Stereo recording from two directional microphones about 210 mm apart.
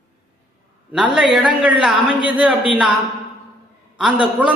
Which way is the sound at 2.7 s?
5° right (ahead or behind).